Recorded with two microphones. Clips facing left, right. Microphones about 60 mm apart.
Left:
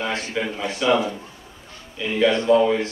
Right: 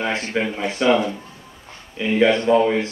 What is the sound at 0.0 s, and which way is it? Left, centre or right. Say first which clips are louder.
A man's voice: right 3 dB; right.